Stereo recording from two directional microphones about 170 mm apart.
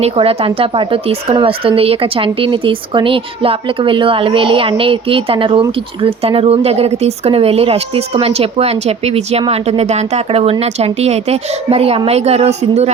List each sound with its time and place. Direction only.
0.0 s speech: 35° right (ahead or behind)